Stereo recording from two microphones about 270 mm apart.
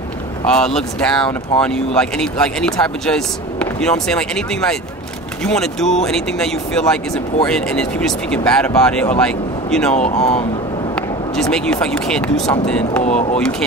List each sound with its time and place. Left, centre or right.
0.5 s speech: centre
9.9 s speech: left
11.0 s speech: centre
13.0 s speech: left
13.4 s speech: centre